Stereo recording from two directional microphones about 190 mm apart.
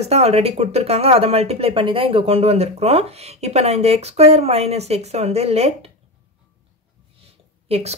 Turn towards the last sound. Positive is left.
turn(degrees=-35)  # may be behind; listen again after turning